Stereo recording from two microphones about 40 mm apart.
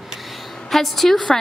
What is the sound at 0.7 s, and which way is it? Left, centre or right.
Speech, centre.